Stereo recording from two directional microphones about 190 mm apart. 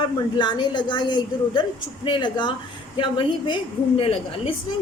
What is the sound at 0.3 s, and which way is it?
A woman's voice, 25° left (ahead or behind).